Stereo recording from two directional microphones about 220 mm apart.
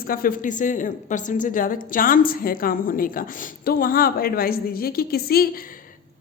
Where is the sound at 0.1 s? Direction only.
40° left (ahead or behind).